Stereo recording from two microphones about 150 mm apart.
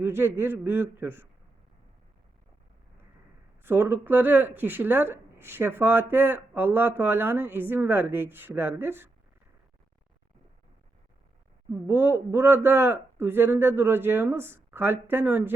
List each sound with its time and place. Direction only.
0.0 s speech: 15° right (ahead or behind)
3.6 s speech: 15° right (ahead or behind)
11.7 s speech: 15° right (ahead or behind)